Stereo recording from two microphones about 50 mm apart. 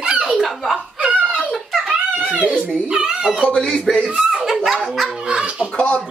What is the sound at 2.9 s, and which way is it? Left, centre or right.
Speech, centre.